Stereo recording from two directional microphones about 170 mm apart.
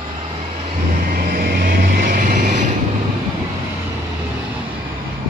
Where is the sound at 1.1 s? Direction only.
65° right (ahead or behind).